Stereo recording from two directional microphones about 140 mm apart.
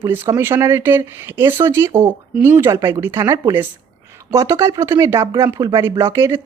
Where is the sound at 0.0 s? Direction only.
20° right (ahead or behind).